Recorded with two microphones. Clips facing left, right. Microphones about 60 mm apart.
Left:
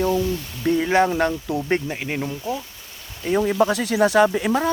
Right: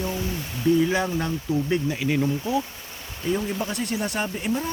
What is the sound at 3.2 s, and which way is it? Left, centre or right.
Speech, left.